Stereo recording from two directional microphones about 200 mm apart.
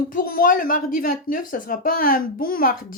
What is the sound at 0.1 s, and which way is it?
Speech, 45° left (ahead or behind).